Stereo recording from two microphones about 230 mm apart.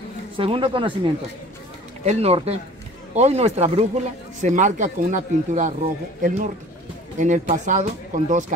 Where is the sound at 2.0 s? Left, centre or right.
Right.